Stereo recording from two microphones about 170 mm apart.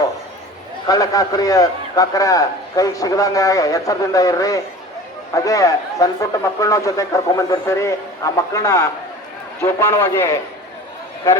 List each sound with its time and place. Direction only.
0.9 s a man's voice: 20° left (ahead or behind)